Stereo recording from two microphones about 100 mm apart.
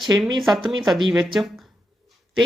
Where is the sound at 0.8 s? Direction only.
5° right (ahead or behind).